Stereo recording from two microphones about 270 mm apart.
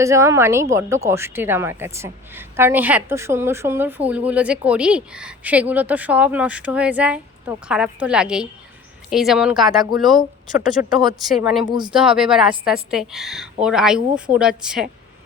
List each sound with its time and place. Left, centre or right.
0.0 s a woman's voice: centre
10.7 s a woman's voice: centre
11.2 s a woman's voice: centre
11.6 s a woman's voice: centre
11.9 s a woman's voice: centre